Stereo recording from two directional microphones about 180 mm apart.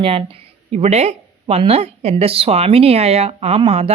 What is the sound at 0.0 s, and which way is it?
Speech, 30° right (ahead or behind).